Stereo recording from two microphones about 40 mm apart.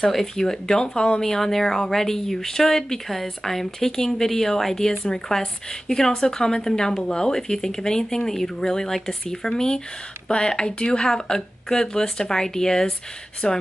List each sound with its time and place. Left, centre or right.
0.0 s speech: centre; by 1.2 s left
1.2 s speech: centre